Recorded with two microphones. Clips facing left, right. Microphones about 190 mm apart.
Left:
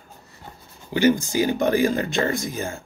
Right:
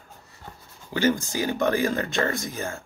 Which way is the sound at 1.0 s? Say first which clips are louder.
Left 5 dB; 15° left (ahead or behind).